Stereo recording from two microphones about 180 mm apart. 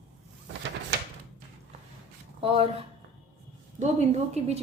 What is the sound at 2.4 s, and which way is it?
Speech, 30° right (ahead or behind).